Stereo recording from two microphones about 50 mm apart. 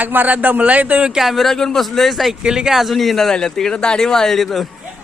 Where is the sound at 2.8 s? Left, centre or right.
Centre.